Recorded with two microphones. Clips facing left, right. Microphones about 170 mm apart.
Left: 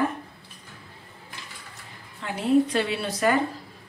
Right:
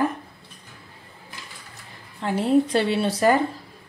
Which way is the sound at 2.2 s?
35° right (ahead or behind).